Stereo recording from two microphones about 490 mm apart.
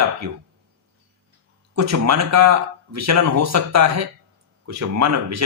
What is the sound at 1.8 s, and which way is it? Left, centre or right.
Speech, right.